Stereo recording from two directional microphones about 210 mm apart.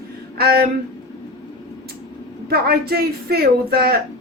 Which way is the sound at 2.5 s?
50° right (ahead or behind).